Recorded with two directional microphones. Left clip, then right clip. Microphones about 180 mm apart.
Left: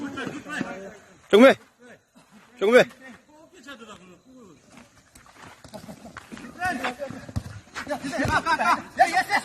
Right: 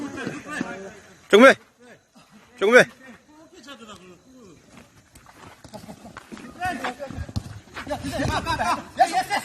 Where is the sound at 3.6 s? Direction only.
15° left (ahead or behind).